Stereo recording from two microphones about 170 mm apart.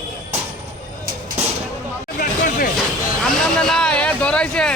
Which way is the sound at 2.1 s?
55° left (ahead or behind).